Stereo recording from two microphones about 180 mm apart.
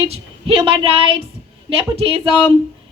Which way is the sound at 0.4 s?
30° right (ahead or behind).